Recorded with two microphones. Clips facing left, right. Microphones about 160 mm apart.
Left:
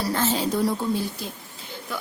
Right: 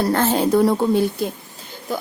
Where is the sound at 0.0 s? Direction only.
55° right (ahead or behind).